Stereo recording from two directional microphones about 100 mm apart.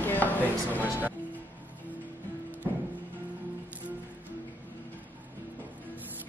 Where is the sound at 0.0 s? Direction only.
20° left (ahead or behind).